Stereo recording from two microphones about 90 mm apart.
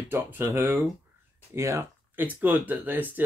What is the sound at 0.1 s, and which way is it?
Speech, 25° right (ahead or behind).